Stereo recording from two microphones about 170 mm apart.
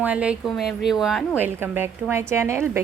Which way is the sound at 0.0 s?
5° right (ahead or behind).